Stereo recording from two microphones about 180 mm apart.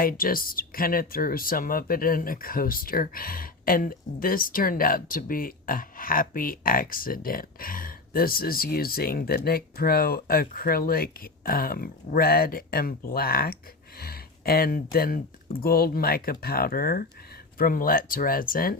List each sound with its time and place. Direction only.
0.0 s speech: 55° left (ahead or behind)